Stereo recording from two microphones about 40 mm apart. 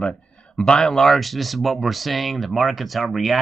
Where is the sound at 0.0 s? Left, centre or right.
Left.